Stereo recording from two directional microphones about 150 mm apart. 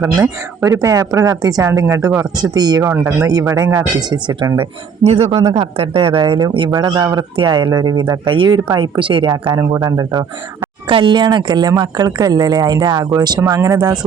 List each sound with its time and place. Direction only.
0.0 s speech: 20° right (ahead or behind)
5.0 s speech: 40° right (ahead or behind)
5.3 s speech: 20° right (ahead or behind)
5.5 s speech: 40° right (ahead or behind)
6.7 s speech: 25° right (ahead or behind)